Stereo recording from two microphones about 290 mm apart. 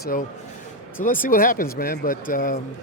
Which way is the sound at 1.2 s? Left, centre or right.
Left.